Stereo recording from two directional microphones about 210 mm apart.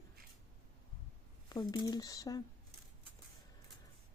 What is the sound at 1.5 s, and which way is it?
Speech, 15° left (ahead or behind).